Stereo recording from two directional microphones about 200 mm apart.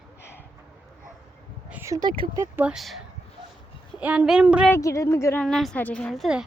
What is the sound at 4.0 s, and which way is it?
Speech, 5° right (ahead or behind).